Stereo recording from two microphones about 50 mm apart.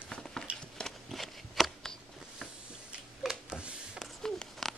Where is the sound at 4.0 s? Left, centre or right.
Centre.